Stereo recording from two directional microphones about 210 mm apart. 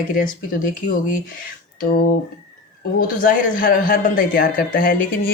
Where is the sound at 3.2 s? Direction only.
40° left (ahead or behind).